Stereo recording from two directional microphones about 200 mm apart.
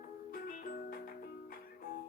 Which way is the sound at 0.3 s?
45° left (ahead or behind).